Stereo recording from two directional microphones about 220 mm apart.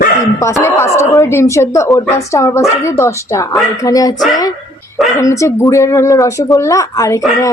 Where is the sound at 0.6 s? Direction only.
10° left (ahead or behind).